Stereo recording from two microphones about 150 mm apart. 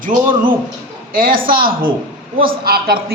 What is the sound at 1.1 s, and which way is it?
A man's voice, 70° right (ahead or behind).